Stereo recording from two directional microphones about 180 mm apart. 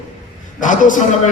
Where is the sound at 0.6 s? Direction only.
45° left (ahead or behind).